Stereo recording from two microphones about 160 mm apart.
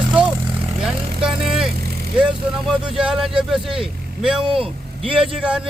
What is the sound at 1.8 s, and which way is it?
Vehicle, 75° right (ahead or behind).